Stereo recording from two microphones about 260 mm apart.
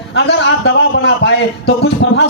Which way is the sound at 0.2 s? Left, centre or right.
Left.